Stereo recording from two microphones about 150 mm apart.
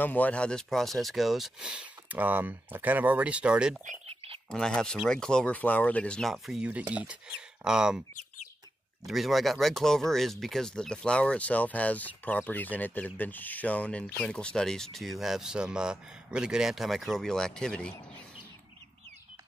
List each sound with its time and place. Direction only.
0.0 s speech: 10° left (ahead or behind); by 3.8 s 5° right (ahead or behind)
4.1 s a sound: 40° right (ahead or behind)
4.5 s speech: 5° left (ahead or behind)
9.0 s speech: centre (ahead or behind)